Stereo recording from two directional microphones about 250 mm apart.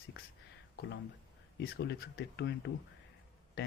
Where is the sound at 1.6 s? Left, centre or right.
Left.